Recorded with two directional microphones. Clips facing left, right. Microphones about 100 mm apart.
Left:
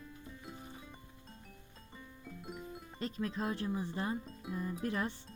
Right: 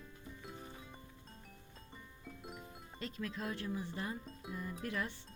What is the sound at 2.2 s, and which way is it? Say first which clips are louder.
Music: left 4 dB; centre (ahead or behind).